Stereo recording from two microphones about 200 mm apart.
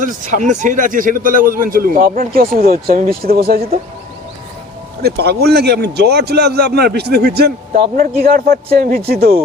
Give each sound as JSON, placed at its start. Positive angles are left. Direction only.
{"t": 0.0, "sound": "a man's voice", "side_deg": -40}
{"t": 5.0, "sound": "a man's voice", "side_deg": -55}